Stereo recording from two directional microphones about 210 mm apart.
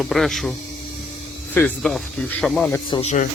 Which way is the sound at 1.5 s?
5° left (ahead or behind).